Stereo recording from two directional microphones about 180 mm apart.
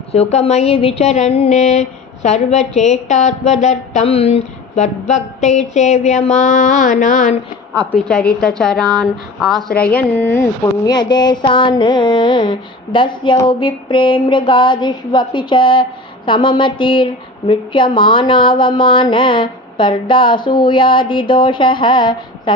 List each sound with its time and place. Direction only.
0.1 s speech: 35° left (ahead or behind)
7.7 s a woman's voice: 5° left (ahead or behind)
10.9 s a sound: 25° left (ahead or behind)